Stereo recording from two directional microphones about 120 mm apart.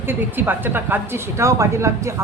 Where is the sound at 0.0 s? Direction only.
15° right (ahead or behind).